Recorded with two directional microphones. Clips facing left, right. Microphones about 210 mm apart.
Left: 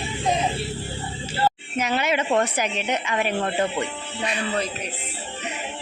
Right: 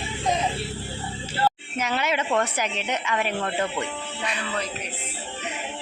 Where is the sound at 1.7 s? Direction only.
10° left (ahead or behind).